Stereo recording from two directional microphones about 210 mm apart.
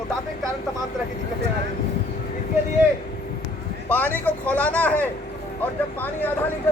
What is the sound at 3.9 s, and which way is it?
A man's voice, 10° left (ahead or behind).